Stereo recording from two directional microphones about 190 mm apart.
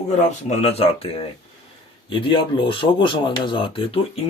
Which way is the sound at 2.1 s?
25° left (ahead or behind).